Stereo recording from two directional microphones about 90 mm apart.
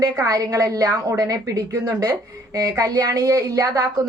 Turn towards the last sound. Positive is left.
turn(degrees=-40)  # may be behind; listen again after turning